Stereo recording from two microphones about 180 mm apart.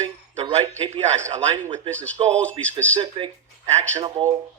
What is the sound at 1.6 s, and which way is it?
Speech, 10° left (ahead or behind).